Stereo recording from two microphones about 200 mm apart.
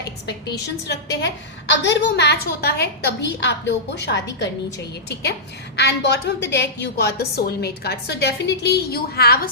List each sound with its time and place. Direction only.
0.9 s a woman's voice: 60° left (ahead or behind)
5.7 s a woman's voice: 60° left (ahead or behind)